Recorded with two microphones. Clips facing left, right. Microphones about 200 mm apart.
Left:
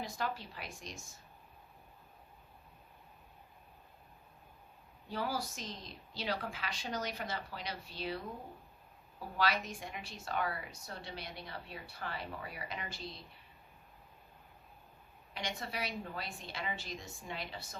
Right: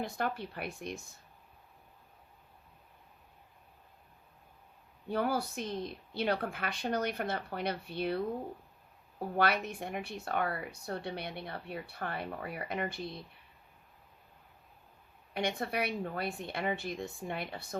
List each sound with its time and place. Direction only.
0.0 s a woman's voice: 60° right (ahead or behind)
5.0 s a woman's voice: 55° right (ahead or behind)
15.3 s a woman's voice: 60° right (ahead or behind)